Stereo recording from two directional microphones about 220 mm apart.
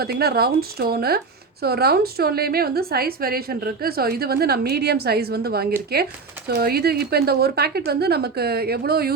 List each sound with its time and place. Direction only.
0.0 s a woman's voice: 45° right (ahead or behind)